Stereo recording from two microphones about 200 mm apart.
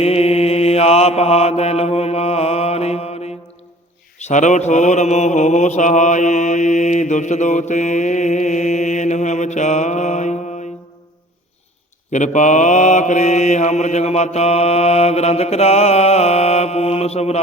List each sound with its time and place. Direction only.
0.0 s mantra: 30° left (ahead or behind)
12.1 s mantra: 40° left (ahead or behind)